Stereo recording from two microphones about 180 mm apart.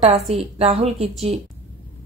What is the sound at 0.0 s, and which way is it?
A woman's voice, 35° right (ahead or behind).